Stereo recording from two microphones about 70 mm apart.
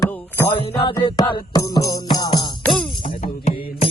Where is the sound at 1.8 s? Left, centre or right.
Left.